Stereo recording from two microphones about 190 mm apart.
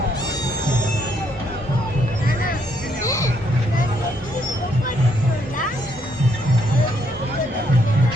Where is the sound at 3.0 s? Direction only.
15° left (ahead or behind).